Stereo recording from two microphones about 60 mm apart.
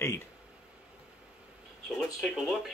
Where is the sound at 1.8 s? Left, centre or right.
Centre.